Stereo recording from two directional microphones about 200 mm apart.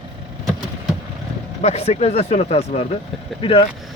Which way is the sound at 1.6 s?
30° left (ahead or behind).